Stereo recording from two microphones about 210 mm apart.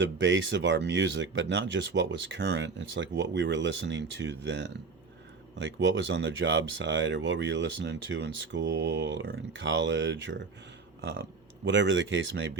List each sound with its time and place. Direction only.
0.0 s speech: 60° right (ahead or behind)
11.6 s speech: 60° right (ahead or behind)